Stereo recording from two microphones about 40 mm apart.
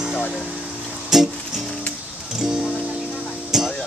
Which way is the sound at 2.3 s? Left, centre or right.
Centre.